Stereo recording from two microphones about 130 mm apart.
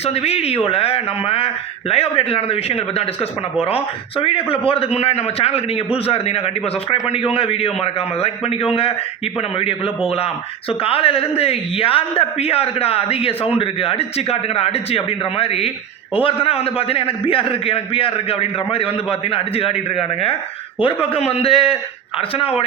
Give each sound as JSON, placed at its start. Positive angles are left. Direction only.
{"t": 0.0, "sound": "speech", "side_deg": 50}